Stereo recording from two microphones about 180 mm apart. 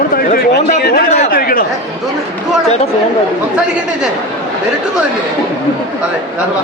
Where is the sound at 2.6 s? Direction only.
35° left (ahead or behind).